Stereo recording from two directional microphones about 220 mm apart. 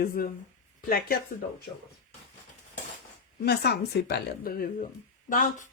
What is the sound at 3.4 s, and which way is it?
Speech, 50° left (ahead or behind).